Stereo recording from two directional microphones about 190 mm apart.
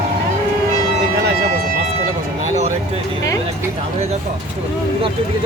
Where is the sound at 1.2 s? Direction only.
55° right (ahead or behind).